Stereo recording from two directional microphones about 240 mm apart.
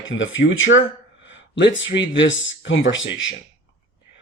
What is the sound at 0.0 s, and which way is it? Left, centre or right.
Speech, left.